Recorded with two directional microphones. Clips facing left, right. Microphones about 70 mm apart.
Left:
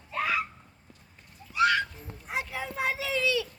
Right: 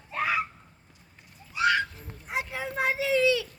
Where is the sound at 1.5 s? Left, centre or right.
Centre.